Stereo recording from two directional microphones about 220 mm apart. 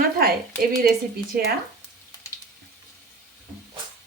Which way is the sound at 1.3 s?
45° right (ahead or behind).